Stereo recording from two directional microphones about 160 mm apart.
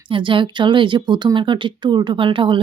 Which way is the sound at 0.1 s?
30° right (ahead or behind).